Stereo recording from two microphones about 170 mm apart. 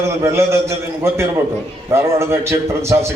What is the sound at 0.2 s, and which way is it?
A man's voice, 15° right (ahead or behind).